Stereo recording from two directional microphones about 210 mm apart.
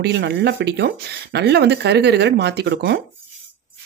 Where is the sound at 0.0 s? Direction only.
55° right (ahead or behind).